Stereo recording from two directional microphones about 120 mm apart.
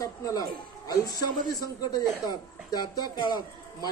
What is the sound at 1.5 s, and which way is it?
Speech, 35° left (ahead or behind).